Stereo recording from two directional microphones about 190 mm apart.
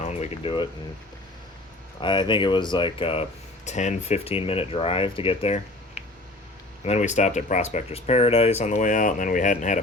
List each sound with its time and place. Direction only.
0.0 s speech: 30° left (ahead or behind)
2.0 s speech: 25° left (ahead or behind); by 9.8 s 40° left (ahead or behind)